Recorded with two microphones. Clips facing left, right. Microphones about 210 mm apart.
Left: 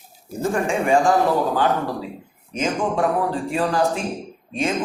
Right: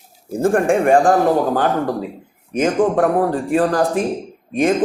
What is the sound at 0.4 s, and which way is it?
Speech, 55° right (ahead or behind).